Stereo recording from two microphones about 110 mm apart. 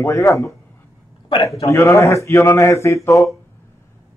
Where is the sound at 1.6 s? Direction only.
30° left (ahead or behind).